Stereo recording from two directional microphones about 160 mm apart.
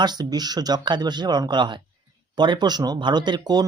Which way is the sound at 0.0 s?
25° right (ahead or behind).